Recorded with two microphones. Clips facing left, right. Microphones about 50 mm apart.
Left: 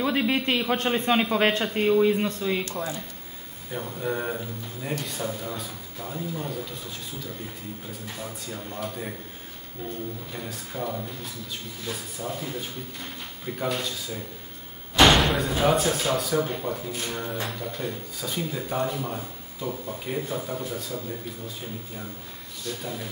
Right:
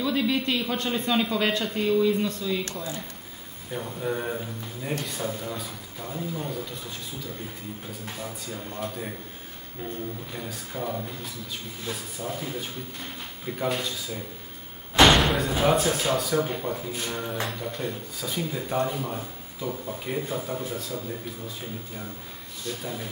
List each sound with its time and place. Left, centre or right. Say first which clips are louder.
0.0 s a man's voice: left 1 dB; left
3.7 s speech: even; centre
8.2 s speech: even; centre
10.3 s speech: even; centre
15.0 s slam: even; centre
15.5 s speech: even; centre
22.7 s speech: even; centre